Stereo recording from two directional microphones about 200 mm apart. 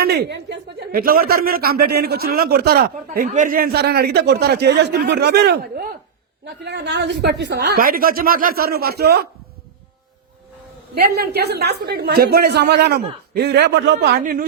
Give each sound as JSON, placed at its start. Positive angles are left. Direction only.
{"t": 0.0, "sound": "speech", "side_deg": -50}
{"t": 6.4, "sound": "speech", "side_deg": -60}
{"t": 10.9, "sound": "a man's voice", "side_deg": -50}